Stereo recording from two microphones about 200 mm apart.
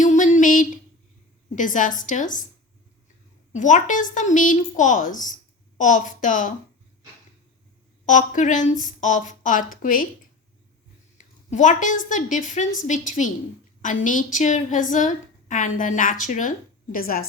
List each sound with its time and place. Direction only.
0.0 s a sound: 40° left (ahead or behind)
1.5 s a woman's voice: 40° left (ahead or behind)
3.5 s a woman's voice: 40° left (ahead or behind)
8.0 s a woman's voice: 40° left (ahead or behind)
11.5 s a woman's voice: 40° left (ahead or behind)